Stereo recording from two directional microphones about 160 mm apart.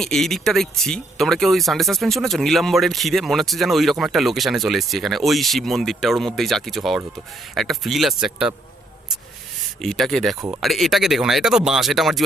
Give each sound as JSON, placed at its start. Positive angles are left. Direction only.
{"t": 0.0, "sound": "speech", "side_deg": 0}
{"t": 9.8, "sound": "speech", "side_deg": 0}